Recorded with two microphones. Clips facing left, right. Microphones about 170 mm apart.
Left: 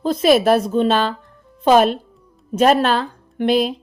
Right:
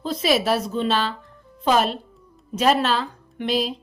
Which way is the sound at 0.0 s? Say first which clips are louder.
Left 7 dB; 50° left (ahead or behind).